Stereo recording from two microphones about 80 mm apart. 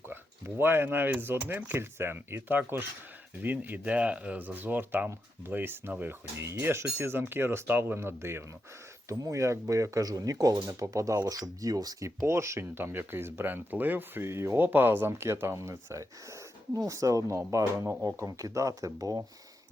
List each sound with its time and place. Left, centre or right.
0.1 s speech: right
9.0 s speech: right